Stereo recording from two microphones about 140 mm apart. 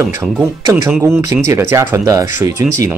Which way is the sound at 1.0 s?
20° right (ahead or behind).